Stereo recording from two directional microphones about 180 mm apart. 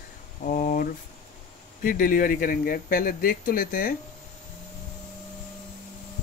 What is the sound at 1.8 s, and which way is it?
Speech, 50° left (ahead or behind).